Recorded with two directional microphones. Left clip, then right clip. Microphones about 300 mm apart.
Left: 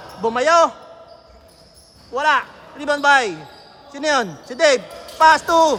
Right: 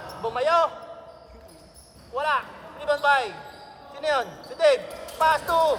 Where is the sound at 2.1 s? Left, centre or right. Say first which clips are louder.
Left 8 dB; left.